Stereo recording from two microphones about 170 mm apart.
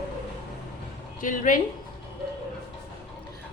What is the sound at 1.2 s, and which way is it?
Speech, 50° left (ahead or behind).